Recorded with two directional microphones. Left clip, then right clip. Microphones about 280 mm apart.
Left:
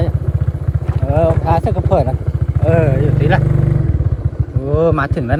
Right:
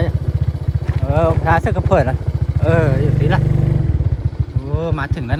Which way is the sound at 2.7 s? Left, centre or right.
Centre.